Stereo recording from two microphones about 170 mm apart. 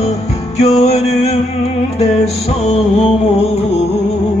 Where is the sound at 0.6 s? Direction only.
40° left (ahead or behind).